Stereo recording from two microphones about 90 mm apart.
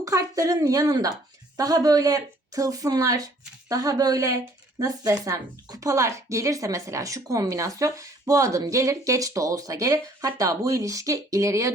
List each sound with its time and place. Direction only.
0.0 s speech: 35° right (ahead or behind)